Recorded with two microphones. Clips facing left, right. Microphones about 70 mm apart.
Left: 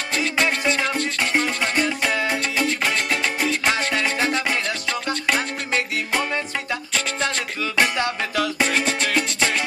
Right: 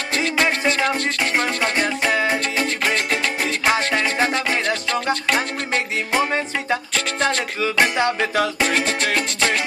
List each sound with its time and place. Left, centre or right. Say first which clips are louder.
0.2 s music: right 2 dB; centre
1.6 s music: right 1 dB; centre
8.0 s music: right 4 dB; right
8.5 s music: right 1 dB; centre